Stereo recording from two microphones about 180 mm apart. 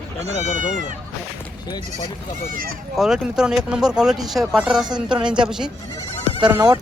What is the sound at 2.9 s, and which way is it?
Speech, centre (ahead or behind).